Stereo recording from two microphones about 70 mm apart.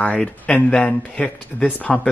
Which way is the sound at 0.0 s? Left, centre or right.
Centre.